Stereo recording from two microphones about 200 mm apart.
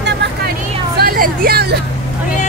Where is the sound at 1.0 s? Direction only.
45° right (ahead or behind).